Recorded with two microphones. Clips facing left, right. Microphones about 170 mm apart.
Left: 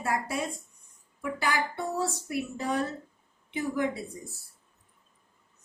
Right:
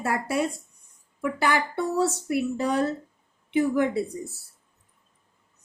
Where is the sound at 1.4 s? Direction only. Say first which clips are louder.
Right 5 dB; 65° right (ahead or behind).